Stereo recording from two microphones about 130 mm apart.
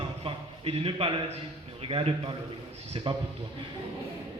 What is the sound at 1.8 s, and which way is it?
A man's voice, 45° right (ahead or behind).